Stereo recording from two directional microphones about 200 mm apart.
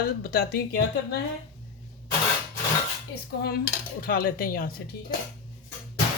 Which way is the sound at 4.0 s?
45° left (ahead or behind).